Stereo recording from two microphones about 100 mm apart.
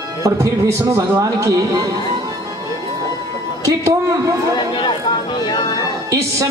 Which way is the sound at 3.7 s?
35° right (ahead or behind).